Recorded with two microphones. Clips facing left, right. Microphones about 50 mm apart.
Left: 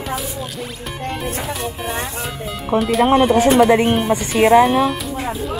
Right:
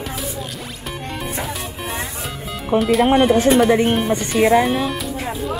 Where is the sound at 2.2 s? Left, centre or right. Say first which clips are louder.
Left 1 dB; centre.